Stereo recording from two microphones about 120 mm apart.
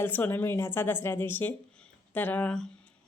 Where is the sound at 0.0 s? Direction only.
15° left (ahead or behind).